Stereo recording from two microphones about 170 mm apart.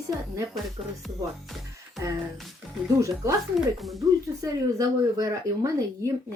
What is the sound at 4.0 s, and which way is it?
Speech, 20° right (ahead or behind).